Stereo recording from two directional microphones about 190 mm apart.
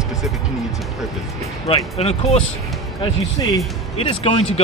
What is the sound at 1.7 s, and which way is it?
Speech, 30° left (ahead or behind).